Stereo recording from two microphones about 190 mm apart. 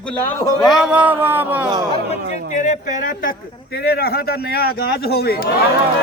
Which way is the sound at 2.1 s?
40° left (ahead or behind).